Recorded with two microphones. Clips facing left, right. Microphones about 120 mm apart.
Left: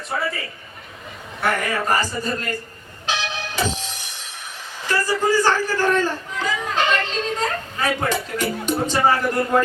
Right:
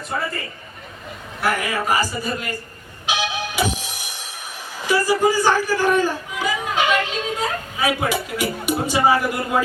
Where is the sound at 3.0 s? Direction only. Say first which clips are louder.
Right 2 dB; 10° right (ahead or behind).